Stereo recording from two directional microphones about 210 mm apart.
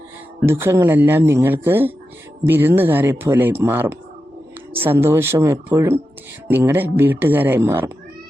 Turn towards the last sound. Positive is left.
turn(degrees=-10)  # may be behind; listen again after turning